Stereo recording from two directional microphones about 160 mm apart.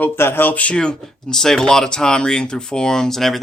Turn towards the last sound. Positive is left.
turn(degrees=0)  # may be behind; listen again after turning